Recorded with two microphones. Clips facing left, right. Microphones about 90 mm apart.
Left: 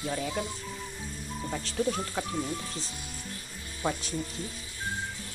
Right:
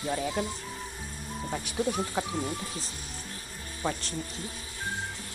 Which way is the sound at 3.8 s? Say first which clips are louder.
Left 1 dB; 10° left (ahead or behind).